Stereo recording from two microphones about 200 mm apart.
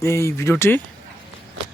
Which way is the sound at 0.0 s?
15° left (ahead or behind).